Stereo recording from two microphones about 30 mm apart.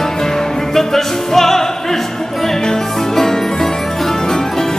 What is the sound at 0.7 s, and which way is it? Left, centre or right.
Music, centre.